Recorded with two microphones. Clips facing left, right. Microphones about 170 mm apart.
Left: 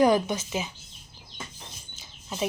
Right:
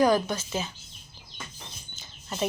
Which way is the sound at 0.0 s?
20° left (ahead or behind).